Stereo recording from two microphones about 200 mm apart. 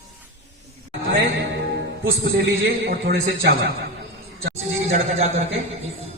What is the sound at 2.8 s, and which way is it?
Speech, 60° right (ahead or behind).